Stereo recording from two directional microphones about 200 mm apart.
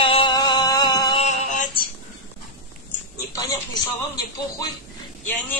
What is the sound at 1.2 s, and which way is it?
Synthetic singing, 35° left (ahead or behind).